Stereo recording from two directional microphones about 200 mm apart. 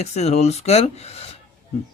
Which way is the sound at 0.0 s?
35° left (ahead or behind).